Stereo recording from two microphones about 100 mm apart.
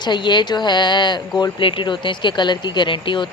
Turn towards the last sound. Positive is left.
turn(degrees=55)  # may be behind; listen again after turning